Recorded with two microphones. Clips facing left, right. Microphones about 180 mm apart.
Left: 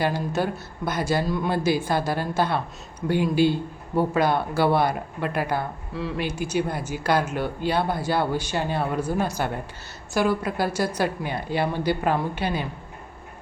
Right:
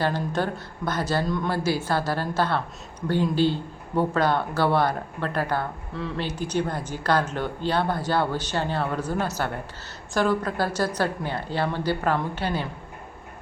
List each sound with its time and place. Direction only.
0.0 s speech: 10° left (ahead or behind)